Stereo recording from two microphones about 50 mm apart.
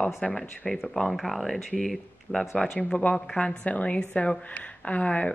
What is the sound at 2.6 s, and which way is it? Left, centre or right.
Speech, centre.